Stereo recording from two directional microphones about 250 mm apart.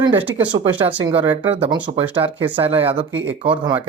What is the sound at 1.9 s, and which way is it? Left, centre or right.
Speech, right.